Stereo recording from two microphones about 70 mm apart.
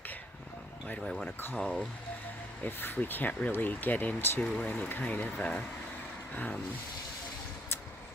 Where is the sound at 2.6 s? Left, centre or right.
Left.